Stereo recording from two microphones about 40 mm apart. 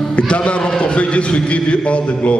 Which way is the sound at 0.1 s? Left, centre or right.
Left.